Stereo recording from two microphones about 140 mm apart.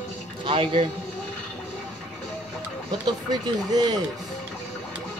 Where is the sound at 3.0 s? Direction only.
30° right (ahead or behind).